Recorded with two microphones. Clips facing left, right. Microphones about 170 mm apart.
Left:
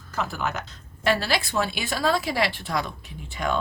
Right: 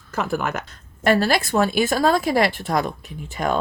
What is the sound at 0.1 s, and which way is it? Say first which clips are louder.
A woman's voice: right 5 dB; 50° right (ahead or behind).